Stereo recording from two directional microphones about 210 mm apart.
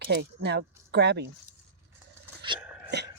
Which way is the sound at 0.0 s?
50° right (ahead or behind).